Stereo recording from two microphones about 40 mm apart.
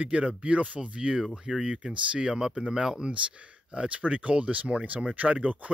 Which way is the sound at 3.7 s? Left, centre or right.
Right.